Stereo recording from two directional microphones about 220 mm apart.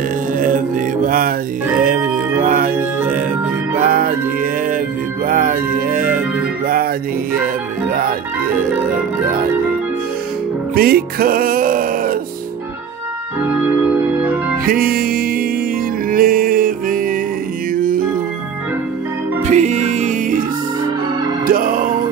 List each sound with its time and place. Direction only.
0.4 s mantra: 35° right (ahead or behind)
2.4 s music: 40° right (ahead or behind)
10.7 s music: 45° right (ahead or behind)
13.4 s organ: 5° right (ahead or behind)
14.7 s music: 40° right (ahead or behind)
19.4 s music: 30° right (ahead or behind)
21.5 s music: 40° right (ahead or behind)